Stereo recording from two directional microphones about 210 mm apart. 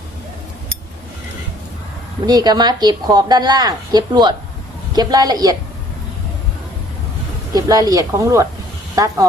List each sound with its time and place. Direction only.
2.2 s a woman's voice: 20° right (ahead or behind)
7.5 s speech: 15° right (ahead or behind)